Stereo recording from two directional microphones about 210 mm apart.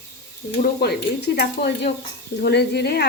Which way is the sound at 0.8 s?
50° left (ahead or behind).